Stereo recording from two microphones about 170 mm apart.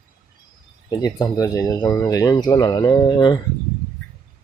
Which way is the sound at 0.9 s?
25° left (ahead or behind).